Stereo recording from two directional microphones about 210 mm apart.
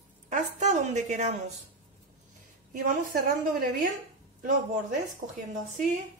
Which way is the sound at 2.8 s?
40° right (ahead or behind).